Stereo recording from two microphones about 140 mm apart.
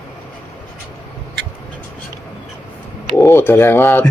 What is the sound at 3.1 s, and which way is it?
Speech, 15° left (ahead or behind).